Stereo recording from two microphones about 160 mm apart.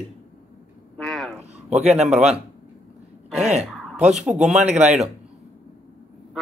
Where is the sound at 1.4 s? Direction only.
45° right (ahead or behind).